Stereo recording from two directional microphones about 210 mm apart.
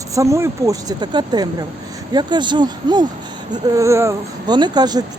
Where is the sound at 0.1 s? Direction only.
15° right (ahead or behind).